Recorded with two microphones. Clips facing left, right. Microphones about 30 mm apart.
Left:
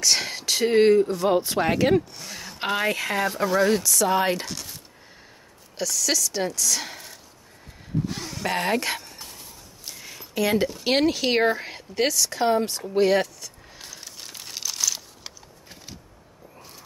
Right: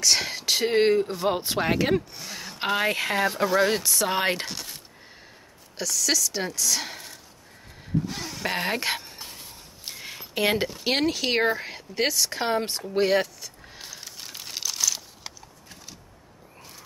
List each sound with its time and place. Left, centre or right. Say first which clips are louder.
0.0 s speech: even; centre
4.0 s speech: left 2 dB; right
5.8 s speech: left 1 dB; centre
8.1 s a sound: left 2 dB; centre
9.4 s a sound: right 1 dB; right
10.5 s speech: left 3 dB; centre
10.8 s speech: left 3 dB; centre; by 12.8 s right
12.9 s crumpling: left 2 dB; centre